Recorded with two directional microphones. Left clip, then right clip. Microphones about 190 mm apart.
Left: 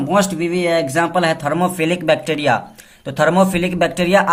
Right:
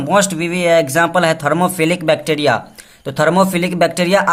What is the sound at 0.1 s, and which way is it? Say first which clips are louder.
Speech: right 3 dB; 55° right (ahead or behind).